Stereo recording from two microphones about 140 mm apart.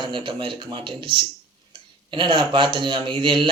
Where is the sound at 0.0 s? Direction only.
35° right (ahead or behind).